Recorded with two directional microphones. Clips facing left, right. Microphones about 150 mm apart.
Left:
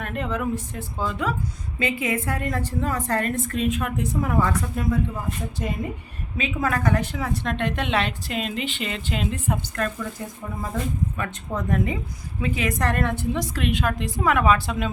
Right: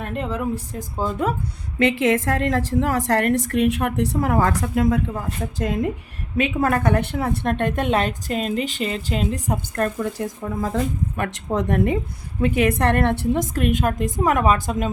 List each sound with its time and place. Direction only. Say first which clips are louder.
0.0 s speech: right 2 dB; 30° right (ahead or behind)
1.8 s a woman's voice: right 7 dB; 90° right
6.3 s a woman's voice: right 5 dB; 60° right (ahead or behind); by 9.9 s 40° right (ahead or behind)
10.0 s a woman's voice: right 7 dB; 75° right (ahead or behind)
12.4 s a woman's voice: right 6 dB; 60° right (ahead or behind); by 14.8 s 40° right (ahead or behind)